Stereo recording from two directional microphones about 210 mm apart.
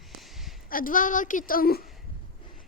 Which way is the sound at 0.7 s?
40° left (ahead or behind).